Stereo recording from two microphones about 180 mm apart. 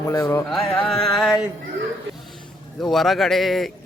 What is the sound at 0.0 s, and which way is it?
Speech, 15° left (ahead or behind).